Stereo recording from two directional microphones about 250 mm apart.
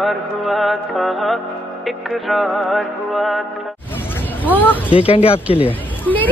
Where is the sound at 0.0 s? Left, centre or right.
Centre.